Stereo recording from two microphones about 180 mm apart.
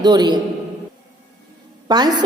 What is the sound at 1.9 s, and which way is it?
Speech, 25° right (ahead or behind).